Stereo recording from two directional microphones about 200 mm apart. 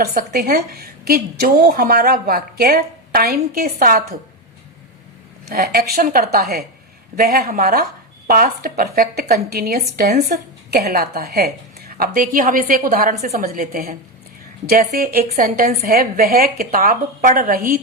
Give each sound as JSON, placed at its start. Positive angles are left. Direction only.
{"t": 0.0, "sound": "a woman's voice", "side_deg": -45}
{"t": 5.5, "sound": "a woman's voice", "side_deg": -50}